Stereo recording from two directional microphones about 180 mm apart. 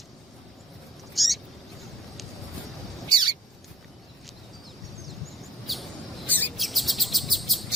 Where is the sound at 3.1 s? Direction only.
25° right (ahead or behind).